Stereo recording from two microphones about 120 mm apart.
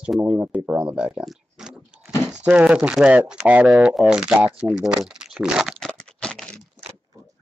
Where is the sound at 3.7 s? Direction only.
Centre (ahead or behind).